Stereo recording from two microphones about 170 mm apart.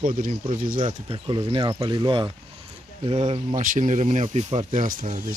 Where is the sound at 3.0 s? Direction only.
35° right (ahead or behind).